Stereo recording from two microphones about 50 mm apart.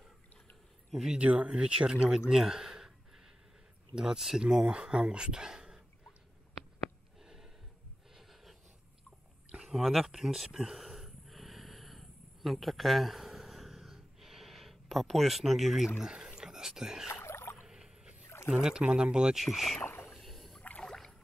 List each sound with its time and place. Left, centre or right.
1.0 s speech: right
3.9 s speech: centre
9.7 s a sound: centre
16.0 s speech: centre
17.1 s rowboat: left
17.6 s a sound: centre
18.2 s dog: left
18.5 s speech: centre
19.3 s speech: centre
19.8 s a sound: left
20.1 s a sound: centre
20.8 s boat: centre